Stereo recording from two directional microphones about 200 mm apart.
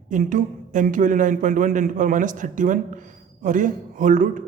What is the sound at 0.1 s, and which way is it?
A man's voice, 40° right (ahead or behind).